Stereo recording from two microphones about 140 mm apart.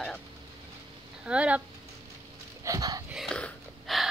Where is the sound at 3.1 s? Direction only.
5° left (ahead or behind).